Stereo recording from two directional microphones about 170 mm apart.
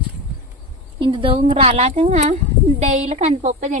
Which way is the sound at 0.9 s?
30° right (ahead or behind).